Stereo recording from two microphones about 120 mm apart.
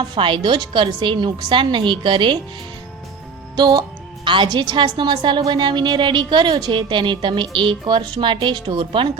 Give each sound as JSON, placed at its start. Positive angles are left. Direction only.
{"t": 0.0, "sound": "a woman's voice", "side_deg": -40}
{"t": 3.5, "sound": "a woman's voice", "side_deg": -35}